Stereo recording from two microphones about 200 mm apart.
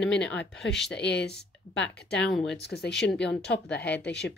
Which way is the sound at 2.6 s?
55° left (ahead or behind).